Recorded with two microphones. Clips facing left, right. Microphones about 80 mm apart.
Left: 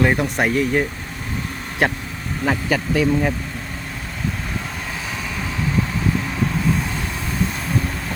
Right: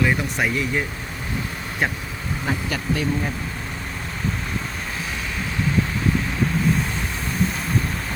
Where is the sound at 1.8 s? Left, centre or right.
Left.